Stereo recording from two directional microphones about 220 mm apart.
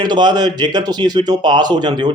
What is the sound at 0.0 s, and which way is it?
Speech, 20° right (ahead or behind).